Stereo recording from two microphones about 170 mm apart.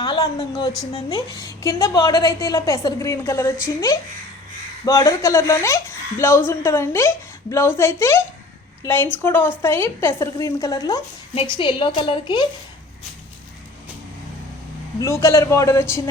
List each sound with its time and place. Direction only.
0.0 s a woman's voice: 20° left (ahead or behind)
14.9 s speech: 20° left (ahead or behind)